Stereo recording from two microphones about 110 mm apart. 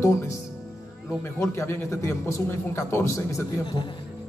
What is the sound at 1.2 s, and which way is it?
A man's voice, 25° left (ahead or behind).